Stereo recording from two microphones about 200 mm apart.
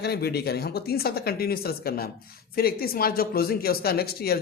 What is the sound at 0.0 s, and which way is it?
A woman's voice, 55° left (ahead or behind).